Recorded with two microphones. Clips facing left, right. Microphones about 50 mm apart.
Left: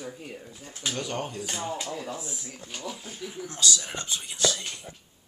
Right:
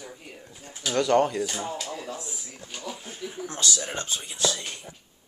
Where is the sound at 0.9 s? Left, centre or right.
Right.